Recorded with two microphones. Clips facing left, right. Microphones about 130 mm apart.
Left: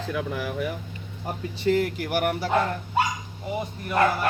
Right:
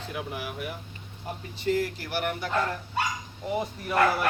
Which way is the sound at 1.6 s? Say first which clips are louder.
Left 4 dB; 65° left (ahead or behind).